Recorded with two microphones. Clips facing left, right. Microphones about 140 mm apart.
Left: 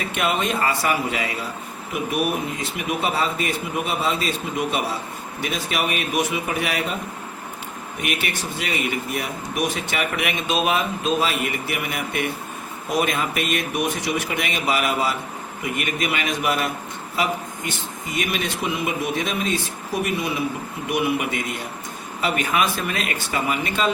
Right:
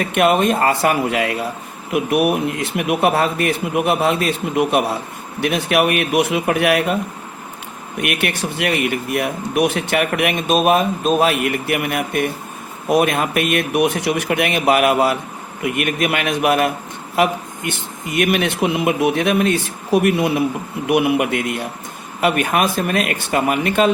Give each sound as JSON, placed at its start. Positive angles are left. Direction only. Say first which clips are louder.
{"t": 0.0, "sound": "speech", "louder": "right 8 dB", "side_deg": -55}
{"t": 8.0, "sound": "speech", "louder": "right 6 dB", "side_deg": -60}